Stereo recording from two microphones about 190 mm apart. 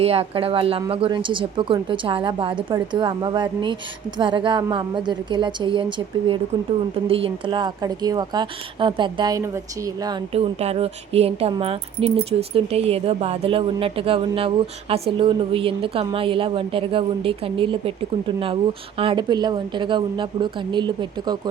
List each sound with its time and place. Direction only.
0.0 s a woman's voice: 30° right (ahead or behind)
18.9 s a woman's voice: 25° right (ahead or behind)